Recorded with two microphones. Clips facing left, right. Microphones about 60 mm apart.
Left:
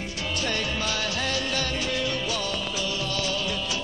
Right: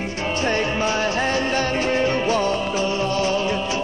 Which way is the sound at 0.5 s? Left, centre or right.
Right.